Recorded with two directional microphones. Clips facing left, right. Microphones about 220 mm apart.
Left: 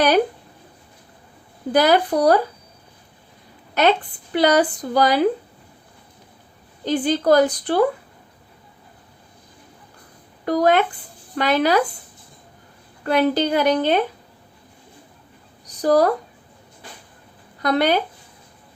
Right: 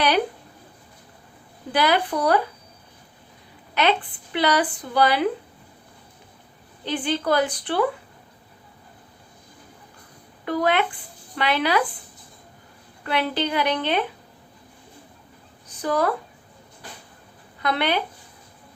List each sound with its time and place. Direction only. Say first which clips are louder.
1.7 s a woman's voice: left 5 dB; 40° left (ahead or behind)
3.8 s speech: left 4 dB; 45° left (ahead or behind)
6.8 s a woman's voice: left 6 dB; 40° left (ahead or behind)
10.4 s a woman's voice: left 5 dB; 40° left (ahead or behind)
13.1 s speech: left 6 dB; 45° left (ahead or behind)
15.6 s speech: left 6 dB; 40° left (ahead or behind)
17.6 s speech: left 5 dB; 40° left (ahead or behind)